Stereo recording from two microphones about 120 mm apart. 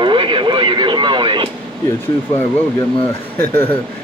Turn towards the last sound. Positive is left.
turn(degrees=15)  # may be behind; listen again after turning